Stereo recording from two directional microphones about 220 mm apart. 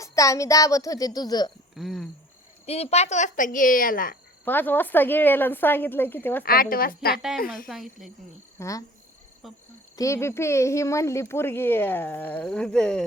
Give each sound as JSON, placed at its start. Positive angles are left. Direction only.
{"t": 0.0, "sound": "speech", "side_deg": 15}
{"t": 1.7, "sound": "speech", "side_deg": 0}
{"t": 2.6, "sound": "a woman's voice", "side_deg": 30}
{"t": 4.4, "sound": "speech", "side_deg": 10}
{"t": 6.4, "sound": "a woman's voice", "side_deg": 40}
{"t": 7.7, "sound": "speech", "side_deg": 0}
{"t": 8.5, "sound": "speech", "side_deg": 15}
{"t": 9.9, "sound": "speech", "side_deg": 15}